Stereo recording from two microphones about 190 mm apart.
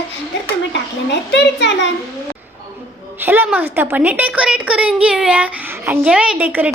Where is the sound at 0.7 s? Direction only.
65° left (ahead or behind).